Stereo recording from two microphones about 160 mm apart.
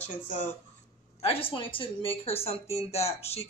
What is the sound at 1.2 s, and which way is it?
A woman's voice, 35° left (ahead or behind).